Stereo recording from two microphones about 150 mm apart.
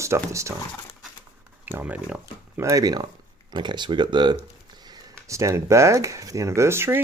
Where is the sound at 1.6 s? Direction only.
15° right (ahead or behind).